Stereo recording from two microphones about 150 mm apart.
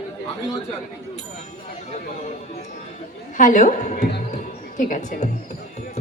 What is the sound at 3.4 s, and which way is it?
Speech, 60° left (ahead or behind).